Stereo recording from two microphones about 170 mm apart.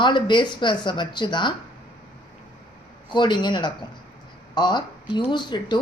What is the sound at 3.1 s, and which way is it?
Speech, 25° left (ahead or behind).